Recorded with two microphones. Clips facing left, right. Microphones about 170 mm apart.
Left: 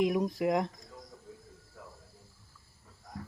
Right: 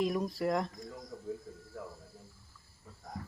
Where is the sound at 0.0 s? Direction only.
15° left (ahead or behind).